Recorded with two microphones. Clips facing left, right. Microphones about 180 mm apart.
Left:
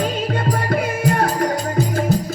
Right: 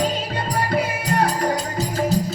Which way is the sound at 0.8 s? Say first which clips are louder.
Left 1 dB; 50° left (ahead or behind).